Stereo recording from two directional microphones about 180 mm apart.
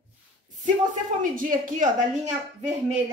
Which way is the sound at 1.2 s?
50° right (ahead or behind).